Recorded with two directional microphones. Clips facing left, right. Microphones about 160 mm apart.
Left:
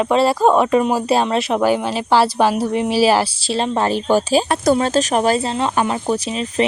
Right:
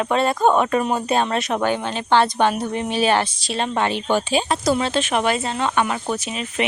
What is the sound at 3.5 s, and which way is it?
A woman's voice, 30° left (ahead or behind).